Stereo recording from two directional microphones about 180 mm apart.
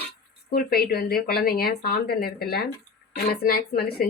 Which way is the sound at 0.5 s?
60° left (ahead or behind).